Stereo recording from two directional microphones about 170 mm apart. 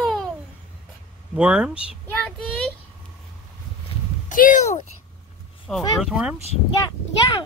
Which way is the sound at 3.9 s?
35° left (ahead or behind).